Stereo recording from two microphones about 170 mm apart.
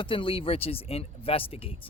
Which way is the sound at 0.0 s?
30° left (ahead or behind).